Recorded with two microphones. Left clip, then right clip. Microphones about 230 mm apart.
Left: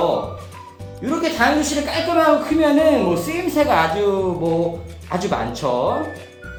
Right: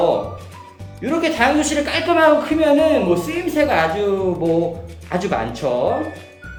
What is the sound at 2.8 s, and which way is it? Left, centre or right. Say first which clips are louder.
Speech: even; centre.